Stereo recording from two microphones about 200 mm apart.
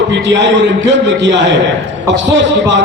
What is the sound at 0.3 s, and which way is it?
A man's voice, 60° right (ahead or behind).